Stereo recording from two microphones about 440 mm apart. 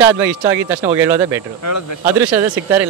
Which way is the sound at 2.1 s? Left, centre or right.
Centre.